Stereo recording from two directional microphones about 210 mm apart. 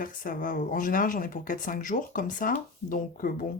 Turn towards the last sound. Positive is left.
turn(degrees=40)  # may be behind; listen again after turning